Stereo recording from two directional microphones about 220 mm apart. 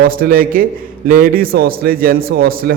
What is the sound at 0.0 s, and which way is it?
A man's voice, 40° right (ahead or behind).